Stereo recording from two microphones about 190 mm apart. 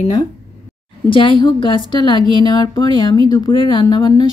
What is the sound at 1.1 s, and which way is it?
A woman's voice, 25° left (ahead or behind).